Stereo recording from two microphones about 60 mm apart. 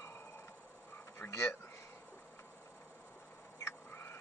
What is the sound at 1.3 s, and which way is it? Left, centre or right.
Speech, left.